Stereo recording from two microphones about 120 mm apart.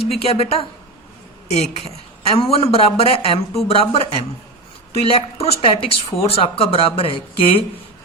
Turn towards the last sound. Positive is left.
turn(degrees=50)  # may be behind; listen again after turning